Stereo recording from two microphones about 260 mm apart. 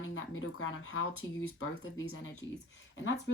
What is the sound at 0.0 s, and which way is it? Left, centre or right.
Speech, left.